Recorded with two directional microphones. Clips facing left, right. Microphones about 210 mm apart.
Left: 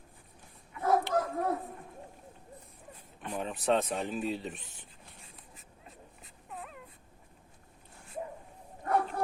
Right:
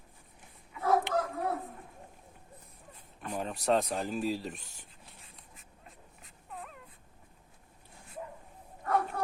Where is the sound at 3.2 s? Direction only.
Centre (ahead or behind).